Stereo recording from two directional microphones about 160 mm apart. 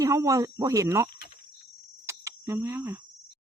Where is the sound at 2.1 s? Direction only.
15° right (ahead or behind).